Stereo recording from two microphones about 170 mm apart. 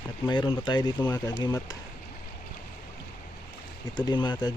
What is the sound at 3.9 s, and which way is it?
Speech, 25° left (ahead or behind).